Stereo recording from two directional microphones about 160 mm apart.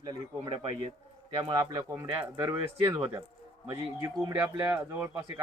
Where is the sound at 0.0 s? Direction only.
25° right (ahead or behind).